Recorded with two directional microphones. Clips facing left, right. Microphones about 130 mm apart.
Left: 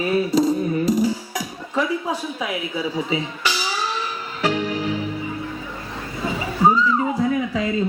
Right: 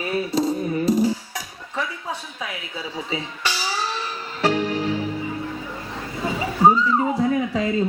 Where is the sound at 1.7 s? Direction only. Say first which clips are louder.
Left 6 dB; 30° left (ahead or behind).